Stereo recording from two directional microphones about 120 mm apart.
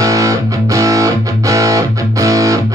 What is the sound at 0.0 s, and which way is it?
Music, 25° right (ahead or behind).